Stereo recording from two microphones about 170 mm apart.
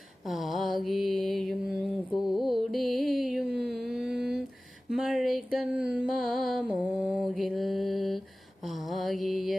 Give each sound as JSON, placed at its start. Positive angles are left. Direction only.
{"t": 0.3, "sound": "mantra", "side_deg": 0}